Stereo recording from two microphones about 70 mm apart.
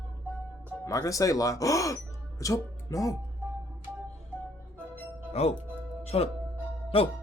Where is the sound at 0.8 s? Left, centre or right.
Left.